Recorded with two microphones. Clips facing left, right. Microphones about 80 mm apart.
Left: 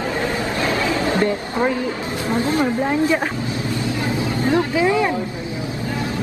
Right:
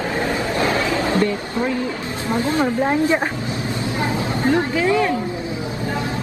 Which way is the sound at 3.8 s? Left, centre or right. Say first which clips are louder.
Right 1 dB; right.